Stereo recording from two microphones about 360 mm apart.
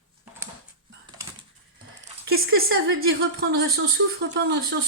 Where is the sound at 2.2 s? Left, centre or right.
Right.